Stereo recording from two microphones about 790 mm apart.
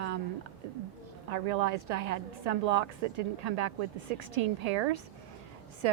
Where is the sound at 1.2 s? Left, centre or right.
Right.